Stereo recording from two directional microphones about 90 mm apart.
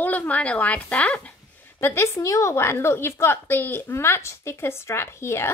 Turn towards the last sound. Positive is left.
turn(degrees=30)  # may be behind; listen again after turning